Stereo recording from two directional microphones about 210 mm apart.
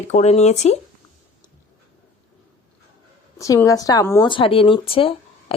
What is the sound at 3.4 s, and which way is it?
Speech, 15° left (ahead or behind).